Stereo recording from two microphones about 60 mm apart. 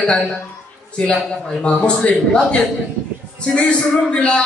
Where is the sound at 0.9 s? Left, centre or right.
Centre.